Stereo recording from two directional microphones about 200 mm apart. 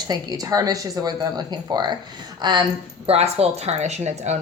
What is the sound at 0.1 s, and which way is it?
Speech, 20° right (ahead or behind).